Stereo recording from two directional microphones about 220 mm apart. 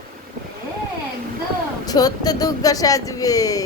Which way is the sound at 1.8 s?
15° left (ahead or behind).